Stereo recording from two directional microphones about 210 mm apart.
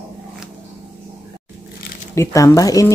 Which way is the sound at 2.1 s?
15° left (ahead or behind).